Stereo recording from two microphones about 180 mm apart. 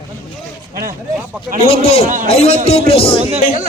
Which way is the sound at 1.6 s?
35° left (ahead or behind).